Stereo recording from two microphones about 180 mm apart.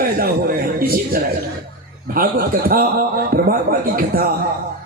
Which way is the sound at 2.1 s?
55° right (ahead or behind).